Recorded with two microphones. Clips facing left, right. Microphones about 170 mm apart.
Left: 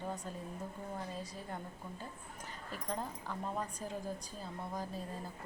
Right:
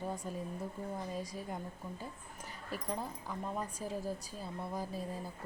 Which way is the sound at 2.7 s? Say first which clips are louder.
Right 1 dB; 10° right (ahead or behind).